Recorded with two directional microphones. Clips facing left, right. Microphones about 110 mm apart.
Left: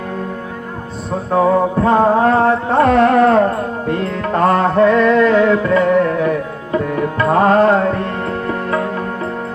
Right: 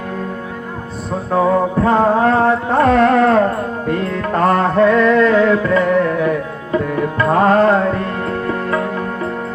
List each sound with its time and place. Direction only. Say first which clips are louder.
1.3 s music: left 1 dB; 30° left (ahead or behind)
7.2 s music: left 1 dB; 25° left (ahead or behind)